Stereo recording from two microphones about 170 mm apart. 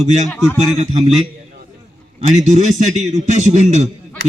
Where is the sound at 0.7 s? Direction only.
40° right (ahead or behind).